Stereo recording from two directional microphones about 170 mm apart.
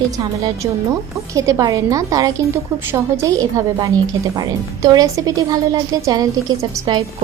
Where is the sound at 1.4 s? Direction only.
20° right (ahead or behind).